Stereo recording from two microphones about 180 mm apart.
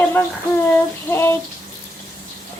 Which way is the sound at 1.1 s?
15° left (ahead or behind).